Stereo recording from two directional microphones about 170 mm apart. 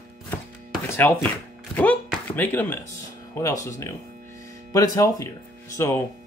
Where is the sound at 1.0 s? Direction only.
10° left (ahead or behind).